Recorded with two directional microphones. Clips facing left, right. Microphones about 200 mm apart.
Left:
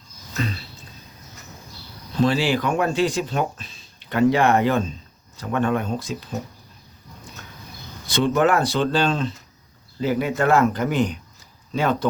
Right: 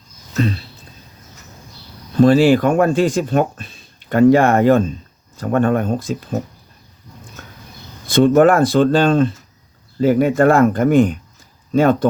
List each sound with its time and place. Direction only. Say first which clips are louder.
2.2 s speech: right 9 dB; 50° right (ahead or behind)
8.0 s speech: right 8 dB; 50° right (ahead or behind)